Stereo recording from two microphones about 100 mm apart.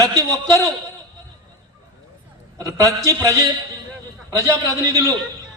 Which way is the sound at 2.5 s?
30° right (ahead or behind).